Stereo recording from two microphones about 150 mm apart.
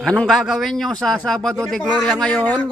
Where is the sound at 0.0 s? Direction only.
5° left (ahead or behind).